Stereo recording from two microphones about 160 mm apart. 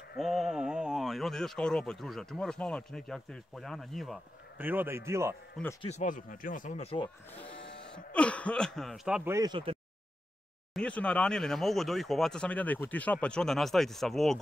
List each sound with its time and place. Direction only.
0.2 s speech: centre (ahead or behind)
4.6 s a man's voice: 10° right (ahead or behind)
5.8 s speech: 45° left (ahead or behind)
6.8 s speech: 35° left (ahead or behind)
7.9 s speech: 5° left (ahead or behind)
9.3 s speech: 20° right (ahead or behind)
10.7 s speech: 5° left (ahead or behind)